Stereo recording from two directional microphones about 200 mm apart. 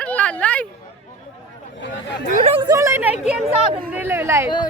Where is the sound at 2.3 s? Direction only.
30° right (ahead or behind).